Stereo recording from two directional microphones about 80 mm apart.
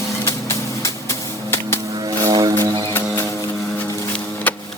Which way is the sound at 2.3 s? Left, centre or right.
Right.